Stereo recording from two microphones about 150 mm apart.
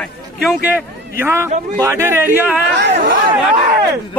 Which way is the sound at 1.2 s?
15° right (ahead or behind).